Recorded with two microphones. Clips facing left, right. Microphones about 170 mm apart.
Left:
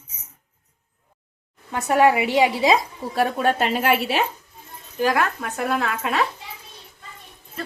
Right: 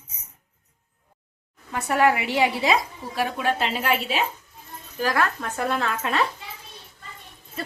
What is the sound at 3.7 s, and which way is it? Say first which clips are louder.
Speech: left 4 dB; 60° left (ahead or behind).